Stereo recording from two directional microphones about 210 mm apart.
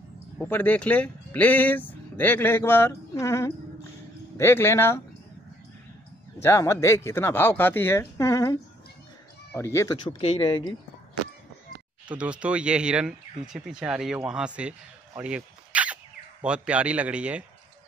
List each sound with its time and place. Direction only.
0.4 s speech: 10° left (ahead or behind)
6.4 s speech: 15° left (ahead or behind)
12.1 s a man's voice: 5° right (ahead or behind)